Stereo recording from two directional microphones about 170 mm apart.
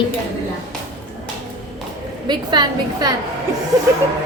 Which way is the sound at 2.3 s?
25° right (ahead or behind).